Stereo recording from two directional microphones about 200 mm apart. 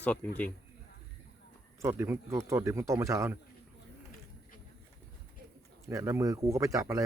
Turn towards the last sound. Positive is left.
turn(degrees=-15)  # may be behind; listen again after turning